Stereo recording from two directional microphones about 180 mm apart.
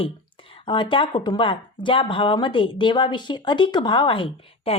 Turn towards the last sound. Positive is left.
turn(degrees=30)  # may be behind; listen again after turning